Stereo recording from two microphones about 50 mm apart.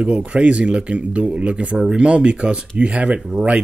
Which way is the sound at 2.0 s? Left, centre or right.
Right.